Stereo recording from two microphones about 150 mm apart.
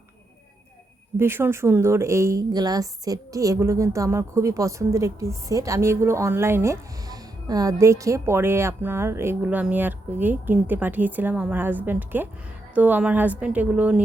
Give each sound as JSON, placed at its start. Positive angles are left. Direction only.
{"t": 1.1, "sound": "a woman's voice", "side_deg": -15}